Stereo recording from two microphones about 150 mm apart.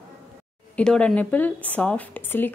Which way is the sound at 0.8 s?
5° left (ahead or behind).